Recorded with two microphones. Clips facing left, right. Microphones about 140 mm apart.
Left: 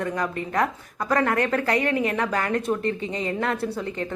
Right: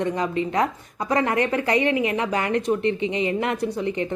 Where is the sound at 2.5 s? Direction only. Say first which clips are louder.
Right 3 dB; 45° left (ahead or behind).